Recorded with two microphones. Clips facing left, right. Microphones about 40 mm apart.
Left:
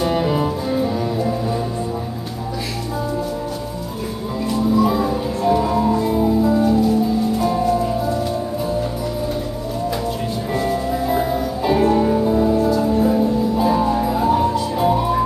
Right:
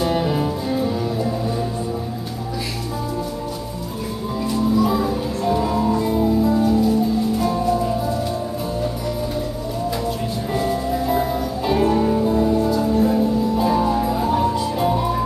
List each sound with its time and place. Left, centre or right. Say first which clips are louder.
0.0 s music: left 2 dB; centre
4.8 s music: left 2 dB; centre
10.5 s music: left 1 dB; centre